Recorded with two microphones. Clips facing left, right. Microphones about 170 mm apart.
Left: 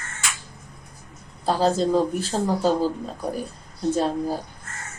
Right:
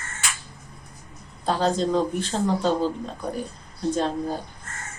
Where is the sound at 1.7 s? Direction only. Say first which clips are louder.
Left 2 dB; 5° left (ahead or behind).